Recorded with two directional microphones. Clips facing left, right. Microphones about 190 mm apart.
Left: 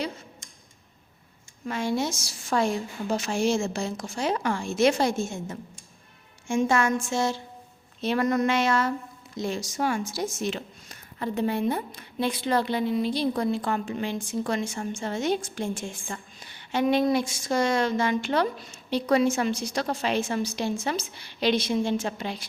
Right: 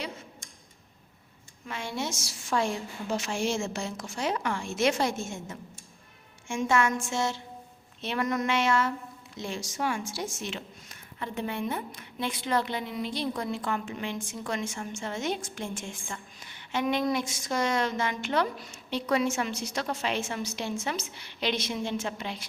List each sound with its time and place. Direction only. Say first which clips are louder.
1.6 s a woman's voice: left 7 dB; 40° left (ahead or behind)